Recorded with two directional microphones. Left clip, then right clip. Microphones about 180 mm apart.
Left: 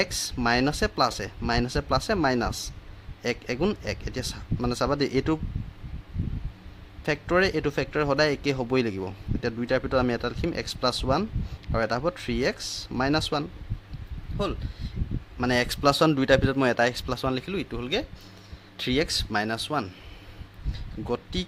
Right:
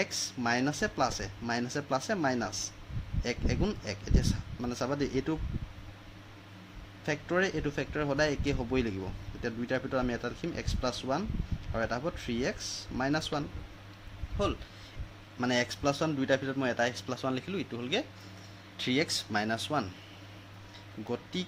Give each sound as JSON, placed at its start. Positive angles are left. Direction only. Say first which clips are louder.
{"t": 0.0, "sound": "a man's voice", "louder": "left 6 dB", "side_deg": 25}
{"t": 7.0, "sound": "a man's voice", "louder": "left 7 dB", "side_deg": 30}
{"t": 15.4, "sound": "a man's voice", "louder": "left 5 dB", "side_deg": 25}